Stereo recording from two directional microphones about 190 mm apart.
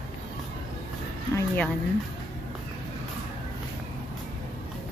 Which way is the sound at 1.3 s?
10° left (ahead or behind).